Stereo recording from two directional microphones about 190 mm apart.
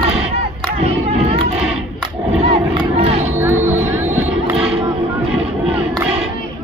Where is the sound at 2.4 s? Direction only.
25° right (ahead or behind).